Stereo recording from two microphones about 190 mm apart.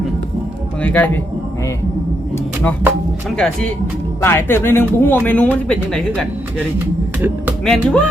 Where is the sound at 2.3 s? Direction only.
10° left (ahead or behind).